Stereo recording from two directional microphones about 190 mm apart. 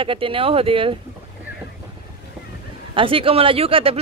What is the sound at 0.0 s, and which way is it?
Speech, 30° right (ahead or behind).